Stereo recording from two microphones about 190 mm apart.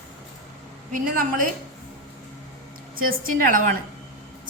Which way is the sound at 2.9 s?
50° right (ahead or behind).